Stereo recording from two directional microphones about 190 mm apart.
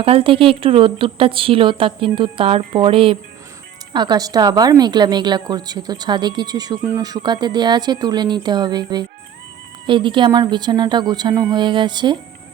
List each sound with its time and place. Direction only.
0.0 s speech: 30° right (ahead or behind)